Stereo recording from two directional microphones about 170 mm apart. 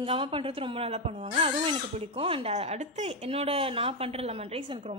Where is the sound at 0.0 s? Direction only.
30° right (ahead or behind).